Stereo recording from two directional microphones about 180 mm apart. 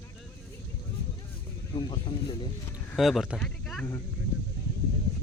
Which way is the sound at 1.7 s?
25° left (ahead or behind).